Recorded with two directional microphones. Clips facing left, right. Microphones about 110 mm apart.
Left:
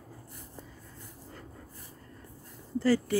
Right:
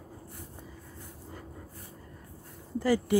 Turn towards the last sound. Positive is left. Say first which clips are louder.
# even
turn(degrees=-15)  # may be behind; listen again after turning